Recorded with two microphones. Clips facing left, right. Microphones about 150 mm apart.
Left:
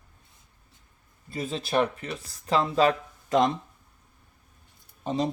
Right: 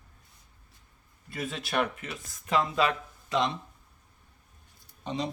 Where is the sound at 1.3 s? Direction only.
30° left (ahead or behind).